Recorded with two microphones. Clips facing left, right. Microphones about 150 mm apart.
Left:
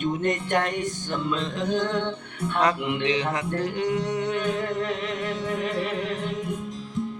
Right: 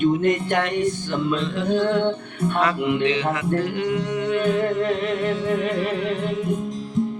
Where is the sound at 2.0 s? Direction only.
30° right (ahead or behind).